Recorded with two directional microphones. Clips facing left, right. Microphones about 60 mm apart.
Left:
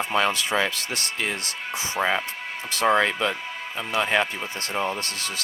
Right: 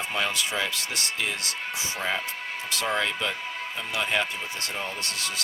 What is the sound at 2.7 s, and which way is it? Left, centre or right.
Speech, left.